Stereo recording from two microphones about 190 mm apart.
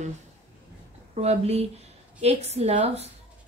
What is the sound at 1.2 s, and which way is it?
Speech, 35° right (ahead or behind).